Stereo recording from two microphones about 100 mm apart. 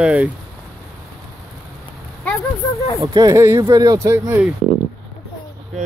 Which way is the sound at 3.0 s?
40° right (ahead or behind).